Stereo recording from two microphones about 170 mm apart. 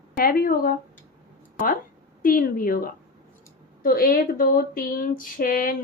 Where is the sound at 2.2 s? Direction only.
55° left (ahead or behind).